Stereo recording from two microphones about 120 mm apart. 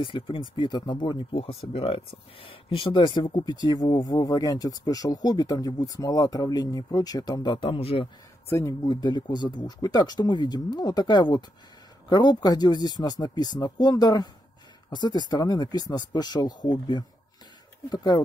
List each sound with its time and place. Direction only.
0.0 s speech: 45° left (ahead or behind)
8.5 s speech: 20° left (ahead or behind)
8.8 s speech: 35° left (ahead or behind)